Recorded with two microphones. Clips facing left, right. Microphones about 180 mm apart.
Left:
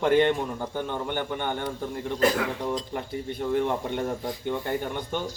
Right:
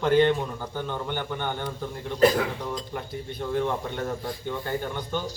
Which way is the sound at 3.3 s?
15° left (ahead or behind).